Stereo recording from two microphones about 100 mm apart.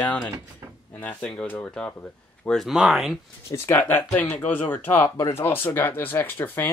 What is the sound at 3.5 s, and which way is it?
Speech, 25° left (ahead or behind).